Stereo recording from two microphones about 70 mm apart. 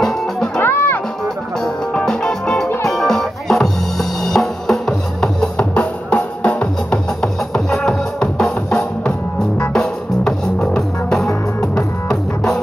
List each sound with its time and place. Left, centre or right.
0.6 s music: left
1.6 s music: centre